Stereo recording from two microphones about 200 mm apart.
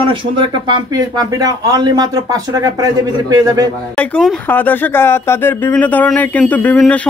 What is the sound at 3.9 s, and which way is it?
Speech, 5° left (ahead or behind).